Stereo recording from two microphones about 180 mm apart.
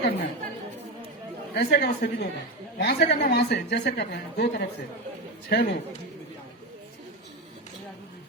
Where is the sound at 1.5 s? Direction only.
65° left (ahead or behind).